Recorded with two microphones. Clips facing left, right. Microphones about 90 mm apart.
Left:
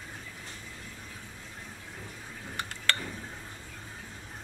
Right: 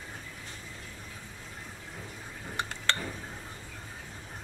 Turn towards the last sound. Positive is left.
turn(degrees=-20)  # may be behind; listen again after turning